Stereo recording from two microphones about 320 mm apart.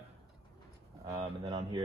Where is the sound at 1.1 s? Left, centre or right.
Centre.